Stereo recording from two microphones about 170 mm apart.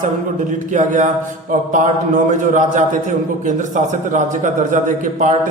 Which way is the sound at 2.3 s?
45° right (ahead or behind).